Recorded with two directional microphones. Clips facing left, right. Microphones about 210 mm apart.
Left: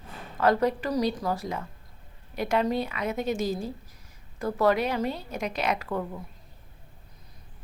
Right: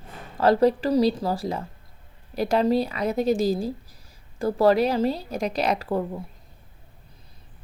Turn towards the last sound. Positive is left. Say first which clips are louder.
# right 4 dB
turn(degrees=-35)  # may be behind; listen again after turning